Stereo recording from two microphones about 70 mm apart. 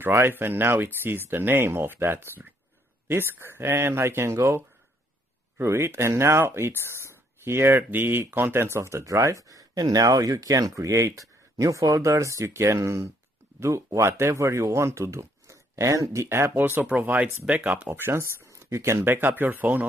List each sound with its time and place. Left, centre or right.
0.0 s speech: right
5.6 s speech: right